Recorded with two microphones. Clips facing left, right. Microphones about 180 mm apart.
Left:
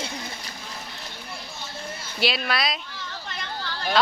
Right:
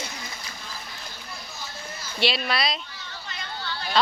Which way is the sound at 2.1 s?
Centre (ahead or behind).